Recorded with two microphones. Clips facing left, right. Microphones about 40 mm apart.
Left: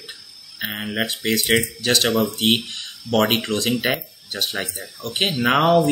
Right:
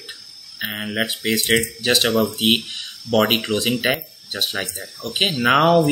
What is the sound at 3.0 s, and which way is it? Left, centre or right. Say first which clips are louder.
Speech: right 1 dB; centre.